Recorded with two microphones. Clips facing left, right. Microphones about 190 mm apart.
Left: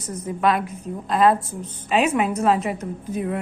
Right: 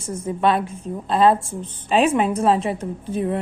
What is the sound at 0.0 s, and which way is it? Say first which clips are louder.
A woman's voice: right 1 dB; 25° right (ahead or behind).